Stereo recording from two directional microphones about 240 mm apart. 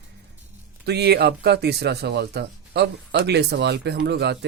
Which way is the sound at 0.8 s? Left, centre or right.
Right.